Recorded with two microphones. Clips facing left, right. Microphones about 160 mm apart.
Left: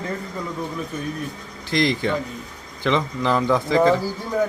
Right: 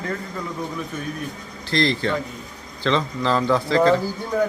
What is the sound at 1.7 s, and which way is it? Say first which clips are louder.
Speech: even; 15° left (ahead or behind).